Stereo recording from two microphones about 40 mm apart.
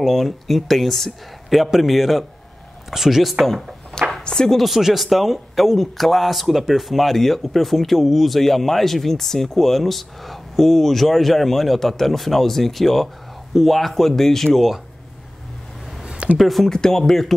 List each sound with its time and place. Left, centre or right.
0.0 s speech: centre
4.2 s speech: centre
4.6 s speech: centre
16.0 s a sound: centre
16.3 s speech: centre
16.6 s speech: centre